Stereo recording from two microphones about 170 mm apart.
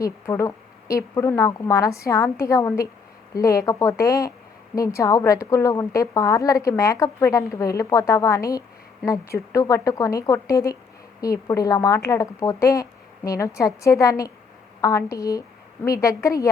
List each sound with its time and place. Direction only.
0.0 s a woman's voice: 20° left (ahead or behind)